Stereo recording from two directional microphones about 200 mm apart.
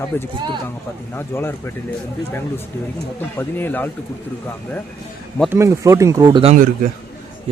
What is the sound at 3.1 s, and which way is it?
Speech, 10° left (ahead or behind).